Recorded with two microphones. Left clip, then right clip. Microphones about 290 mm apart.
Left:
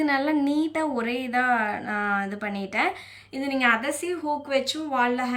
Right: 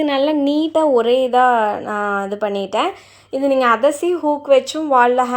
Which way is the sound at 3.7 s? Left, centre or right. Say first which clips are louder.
Right 10 dB; right.